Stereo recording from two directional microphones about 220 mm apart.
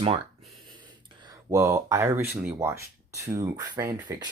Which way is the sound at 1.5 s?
10° right (ahead or behind).